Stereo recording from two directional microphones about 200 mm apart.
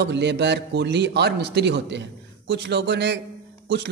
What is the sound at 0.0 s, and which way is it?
Speech, 60° right (ahead or behind).